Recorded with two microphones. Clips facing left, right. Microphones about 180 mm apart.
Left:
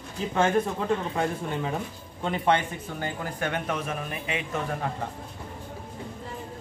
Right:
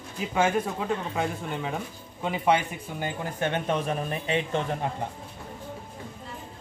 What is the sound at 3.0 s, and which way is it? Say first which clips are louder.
Speech: right 2 dB; 20° right (ahead or behind).